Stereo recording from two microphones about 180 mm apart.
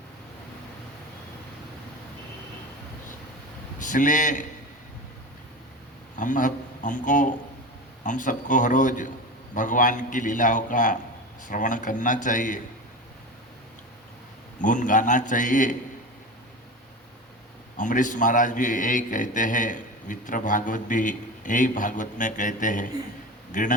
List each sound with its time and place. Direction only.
3.8 s a man's voice: 45° left (ahead or behind)
6.1 s a man's voice: 45° left (ahead or behind)
14.6 s a man's voice: 45° left (ahead or behind)
17.7 s a man's voice: 45° left (ahead or behind)